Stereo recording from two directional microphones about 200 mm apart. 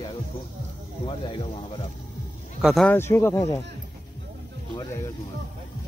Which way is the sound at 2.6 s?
Centre (ahead or behind).